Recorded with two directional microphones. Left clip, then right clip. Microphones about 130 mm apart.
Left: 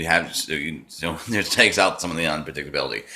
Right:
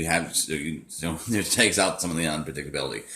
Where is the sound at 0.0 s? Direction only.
30° right (ahead or behind).